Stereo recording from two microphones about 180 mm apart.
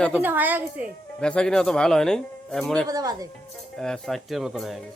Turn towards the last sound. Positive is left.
turn(degrees=0)  # may be behind; listen again after turning